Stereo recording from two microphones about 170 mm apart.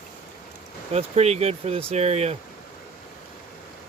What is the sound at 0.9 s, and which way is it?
Speech, 40° right (ahead or behind).